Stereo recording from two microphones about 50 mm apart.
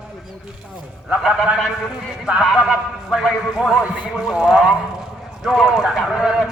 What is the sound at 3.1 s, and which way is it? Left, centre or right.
A man's voice, centre.